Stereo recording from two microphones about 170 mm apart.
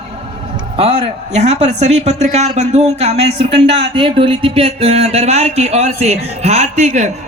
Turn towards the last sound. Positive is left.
turn(degrees=-45)  # may be behind; listen again after turning